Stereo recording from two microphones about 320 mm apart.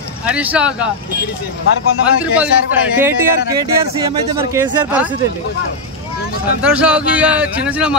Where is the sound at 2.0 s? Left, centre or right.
Centre.